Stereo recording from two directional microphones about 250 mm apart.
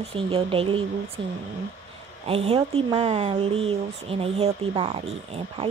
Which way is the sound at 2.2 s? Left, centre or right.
Right.